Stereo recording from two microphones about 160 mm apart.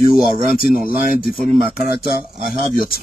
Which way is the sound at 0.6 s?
65° left (ahead or behind).